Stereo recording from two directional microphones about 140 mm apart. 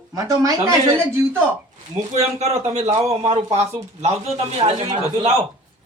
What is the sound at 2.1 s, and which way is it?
A man's voice, 50° right (ahead or behind).